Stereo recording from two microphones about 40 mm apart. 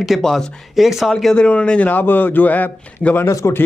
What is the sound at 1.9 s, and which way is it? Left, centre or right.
A man's voice, left.